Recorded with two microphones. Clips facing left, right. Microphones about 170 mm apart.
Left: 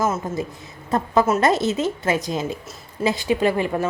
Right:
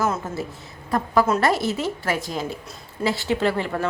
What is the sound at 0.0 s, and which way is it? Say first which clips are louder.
A woman's voice: left 2 dB; 15° left (ahead or behind).